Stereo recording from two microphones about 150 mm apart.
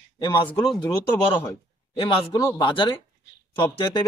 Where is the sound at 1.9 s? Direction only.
35° left (ahead or behind).